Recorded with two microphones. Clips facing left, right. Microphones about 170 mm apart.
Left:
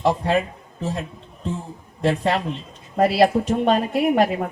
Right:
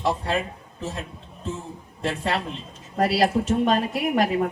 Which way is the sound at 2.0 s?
40° left (ahead or behind).